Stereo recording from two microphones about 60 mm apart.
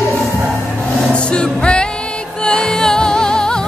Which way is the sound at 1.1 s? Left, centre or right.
Centre.